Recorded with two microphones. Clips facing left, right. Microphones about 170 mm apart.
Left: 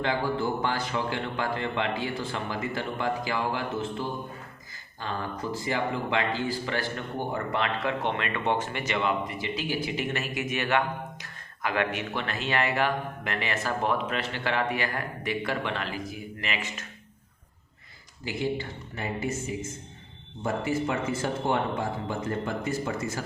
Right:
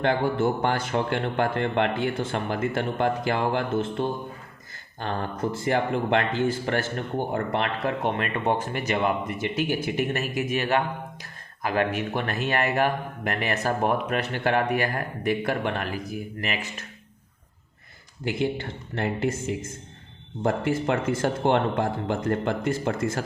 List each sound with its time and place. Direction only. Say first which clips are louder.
0.0 s a man's voice: right 5 dB; 60° right (ahead or behind); by 16.8 s 40° right (ahead or behind)
18.3 s a man's voice: right 3 dB; 65° right (ahead or behind)